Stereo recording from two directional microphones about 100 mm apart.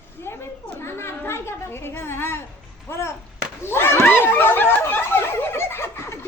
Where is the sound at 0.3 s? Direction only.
25° left (ahead or behind).